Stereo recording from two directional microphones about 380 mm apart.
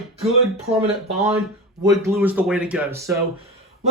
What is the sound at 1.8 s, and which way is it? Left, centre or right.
A man's voice, centre.